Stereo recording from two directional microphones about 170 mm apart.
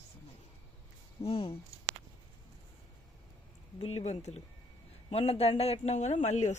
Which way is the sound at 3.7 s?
35° left (ahead or behind).